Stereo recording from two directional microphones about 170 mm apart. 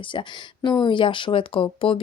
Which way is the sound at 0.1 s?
30° left (ahead or behind).